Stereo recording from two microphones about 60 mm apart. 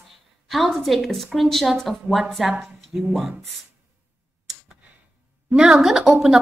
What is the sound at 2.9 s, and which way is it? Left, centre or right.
Speech, right.